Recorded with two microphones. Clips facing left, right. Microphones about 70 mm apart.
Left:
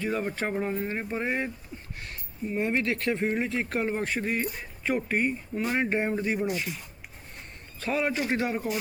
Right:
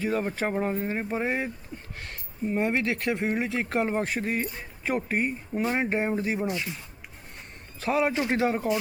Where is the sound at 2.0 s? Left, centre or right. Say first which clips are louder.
Right 4 dB; right.